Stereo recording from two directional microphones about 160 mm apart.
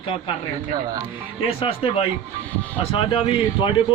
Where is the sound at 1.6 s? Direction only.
35° left (ahead or behind).